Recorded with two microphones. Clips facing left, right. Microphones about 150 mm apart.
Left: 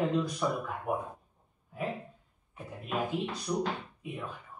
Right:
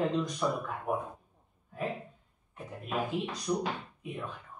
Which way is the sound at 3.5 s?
5° right (ahead or behind).